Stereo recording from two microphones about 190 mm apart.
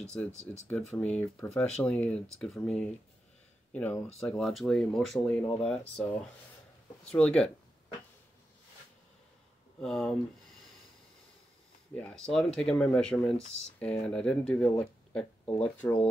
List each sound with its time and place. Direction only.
0.0 s speech: 5° left (ahead or behind)
9.8 s speech: centre (ahead or behind)
11.9 s speech: 5° left (ahead or behind)